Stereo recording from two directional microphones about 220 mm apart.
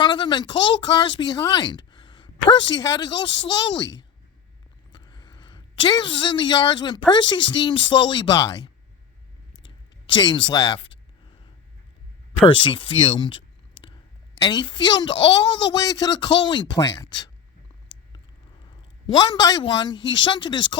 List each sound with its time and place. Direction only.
0.0 s speech: 20° left (ahead or behind)
4.9 s a sound: 20° left (ahead or behind)
7.1 s speech: 20° left (ahead or behind)
10.2 s speech: 20° left (ahead or behind)
12.6 s speech: 20° left (ahead or behind)
14.4 s speech: 20° left (ahead or behind)
18.6 s speech: 20° left (ahead or behind)